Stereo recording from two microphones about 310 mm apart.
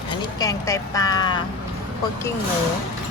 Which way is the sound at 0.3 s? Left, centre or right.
Centre.